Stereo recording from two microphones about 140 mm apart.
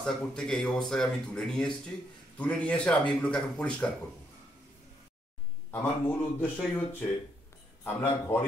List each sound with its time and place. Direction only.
0.0 s speech: 5° left (ahead or behind)
5.7 s speech: 15° left (ahead or behind)